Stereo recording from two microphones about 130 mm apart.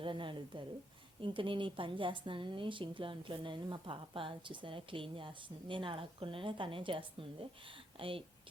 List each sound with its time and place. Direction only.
0.0 s a woman's voice: 40° right (ahead or behind)